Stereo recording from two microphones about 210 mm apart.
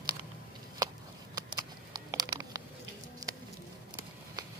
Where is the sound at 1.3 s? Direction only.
20° right (ahead or behind).